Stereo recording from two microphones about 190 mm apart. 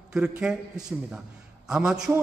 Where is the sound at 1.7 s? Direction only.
5° right (ahead or behind).